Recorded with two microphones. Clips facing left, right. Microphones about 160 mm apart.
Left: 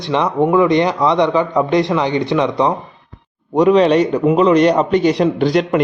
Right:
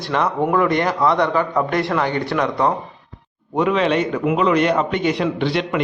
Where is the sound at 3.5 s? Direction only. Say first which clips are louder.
Left 7 dB; 40° left (ahead or behind).